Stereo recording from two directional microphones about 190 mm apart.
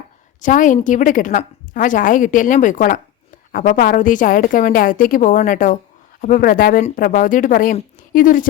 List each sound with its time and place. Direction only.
0.4 s a woman's voice: 40° left (ahead or behind)